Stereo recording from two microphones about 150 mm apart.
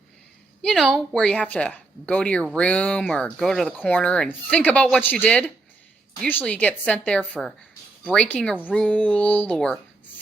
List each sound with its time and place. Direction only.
0.6 s speech: centre (ahead or behind)